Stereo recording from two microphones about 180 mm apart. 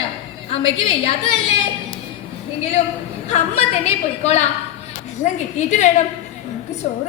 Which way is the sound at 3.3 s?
40° left (ahead or behind).